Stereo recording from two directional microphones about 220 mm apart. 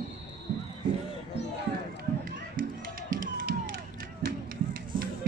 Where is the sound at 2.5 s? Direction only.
40° right (ahead or behind).